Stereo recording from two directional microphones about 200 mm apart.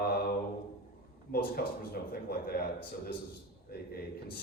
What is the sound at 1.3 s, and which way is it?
A man's voice, 45° left (ahead or behind).